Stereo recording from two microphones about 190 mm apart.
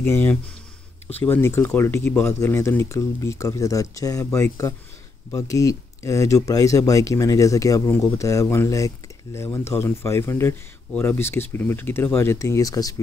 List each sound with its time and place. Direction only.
0.0 s speech: 10° left (ahead or behind)